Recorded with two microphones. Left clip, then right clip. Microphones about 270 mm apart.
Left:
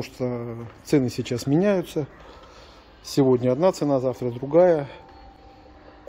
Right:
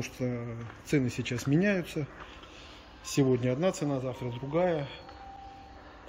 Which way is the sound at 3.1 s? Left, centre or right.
Centre.